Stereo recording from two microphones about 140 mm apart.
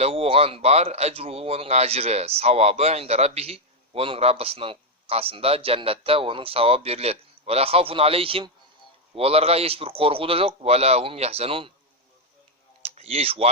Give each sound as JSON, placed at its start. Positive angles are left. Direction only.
{"t": 0.0, "sound": "speech", "side_deg": -45}
{"t": 12.8, "sound": "speech", "side_deg": -45}